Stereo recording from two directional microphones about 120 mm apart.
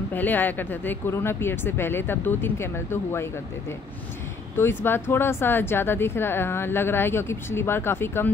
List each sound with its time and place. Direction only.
0.1 s speech: 15° left (ahead or behind)
4.6 s speech: 20° left (ahead or behind)